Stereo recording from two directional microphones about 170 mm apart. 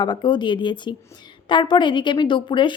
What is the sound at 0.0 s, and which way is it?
A woman's voice, 25° left (ahead or behind).